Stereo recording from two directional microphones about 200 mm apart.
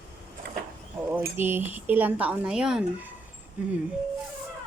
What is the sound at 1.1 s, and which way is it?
Speech, 10° right (ahead or behind).